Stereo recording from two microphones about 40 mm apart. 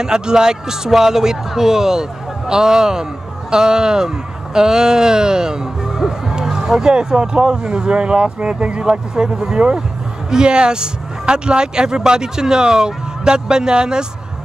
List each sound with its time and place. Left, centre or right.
0.0 s a man's voice: centre